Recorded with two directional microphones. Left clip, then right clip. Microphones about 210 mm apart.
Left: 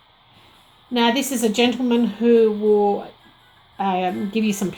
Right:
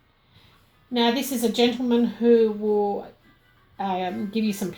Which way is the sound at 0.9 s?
35° left (ahead or behind).